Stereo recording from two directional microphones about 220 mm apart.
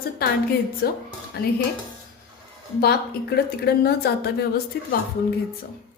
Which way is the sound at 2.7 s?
45° left (ahead or behind).